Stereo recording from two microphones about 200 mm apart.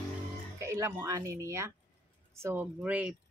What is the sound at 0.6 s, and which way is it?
A woman's voice, 15° right (ahead or behind).